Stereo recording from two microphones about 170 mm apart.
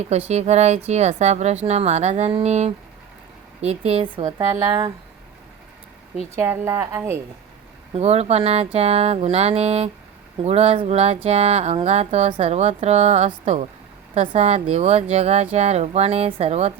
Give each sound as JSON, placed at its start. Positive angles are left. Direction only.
{"t": 0.3, "sound": "speech", "side_deg": -40}
{"t": 4.4, "sound": "a woman's voice", "side_deg": -15}
{"t": 6.3, "sound": "a woman's voice", "side_deg": -15}
{"t": 7.9, "sound": "speech", "side_deg": -40}